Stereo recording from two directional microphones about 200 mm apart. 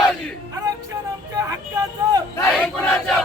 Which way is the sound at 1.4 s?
20° right (ahead or behind).